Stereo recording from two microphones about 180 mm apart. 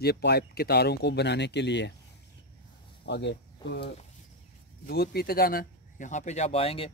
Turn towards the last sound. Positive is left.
turn(degrees=30)  # may be behind; listen again after turning